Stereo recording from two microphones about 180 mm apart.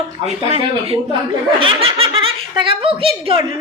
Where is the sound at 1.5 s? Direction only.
30° right (ahead or behind).